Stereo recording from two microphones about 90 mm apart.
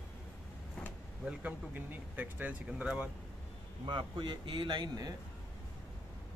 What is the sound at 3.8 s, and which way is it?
Speech, 60° right (ahead or behind).